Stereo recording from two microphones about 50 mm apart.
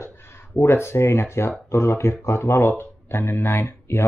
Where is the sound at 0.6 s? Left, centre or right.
Left.